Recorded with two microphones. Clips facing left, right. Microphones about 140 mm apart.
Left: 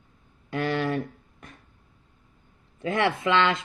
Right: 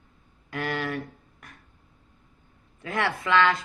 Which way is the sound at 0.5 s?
25° left (ahead or behind).